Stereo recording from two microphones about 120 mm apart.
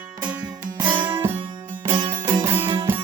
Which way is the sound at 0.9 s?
15° right (ahead or behind).